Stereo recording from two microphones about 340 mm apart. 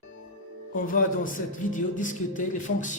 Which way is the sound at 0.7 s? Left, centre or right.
Left.